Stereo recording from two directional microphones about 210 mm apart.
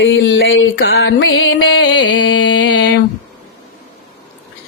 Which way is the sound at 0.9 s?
55° left (ahead or behind).